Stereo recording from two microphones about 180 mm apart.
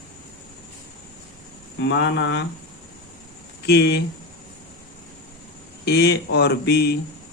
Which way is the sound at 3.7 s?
65° left (ahead or behind).